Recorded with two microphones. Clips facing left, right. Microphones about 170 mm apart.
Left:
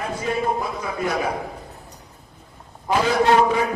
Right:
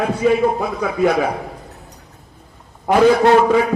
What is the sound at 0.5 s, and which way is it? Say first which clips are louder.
Speech: right 7 dB; 70° right (ahead or behind).